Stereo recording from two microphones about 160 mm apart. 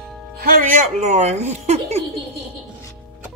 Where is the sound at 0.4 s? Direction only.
60° right (ahead or behind); by 2.0 s 45° right (ahead or behind).